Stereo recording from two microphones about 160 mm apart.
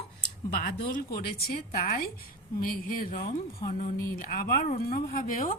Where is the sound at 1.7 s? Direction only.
60° left (ahead or behind).